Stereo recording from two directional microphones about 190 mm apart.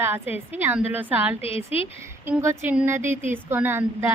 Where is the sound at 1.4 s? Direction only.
30° left (ahead or behind).